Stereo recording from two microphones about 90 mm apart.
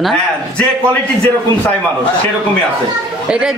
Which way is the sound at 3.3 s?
10° right (ahead or behind).